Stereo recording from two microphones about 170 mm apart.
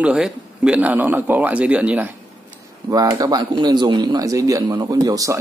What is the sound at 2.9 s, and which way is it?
Speech, 20° right (ahead or behind).